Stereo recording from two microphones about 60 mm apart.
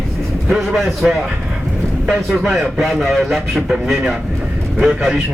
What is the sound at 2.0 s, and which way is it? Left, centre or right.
Speech, centre.